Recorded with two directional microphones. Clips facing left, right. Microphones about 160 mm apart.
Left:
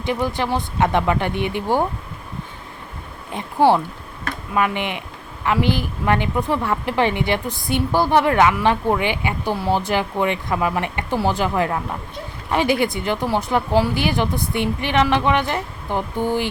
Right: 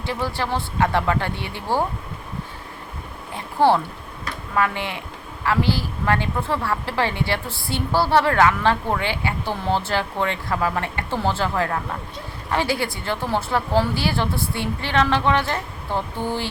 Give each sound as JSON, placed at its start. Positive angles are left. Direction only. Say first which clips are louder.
{"t": 0.0, "sound": "speech", "louder": "left 4 dB", "side_deg": 20}
{"t": 3.3, "sound": "a woman's voice", "louder": "left 2 dB", "side_deg": 15}